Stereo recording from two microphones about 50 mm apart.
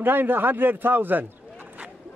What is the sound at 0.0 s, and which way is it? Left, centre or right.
A man's voice, right.